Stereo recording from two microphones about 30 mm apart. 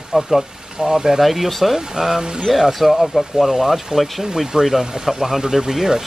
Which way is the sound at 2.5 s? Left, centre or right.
Centre.